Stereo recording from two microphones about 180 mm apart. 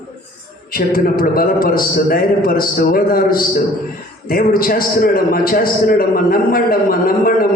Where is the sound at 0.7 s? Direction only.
50° left (ahead or behind).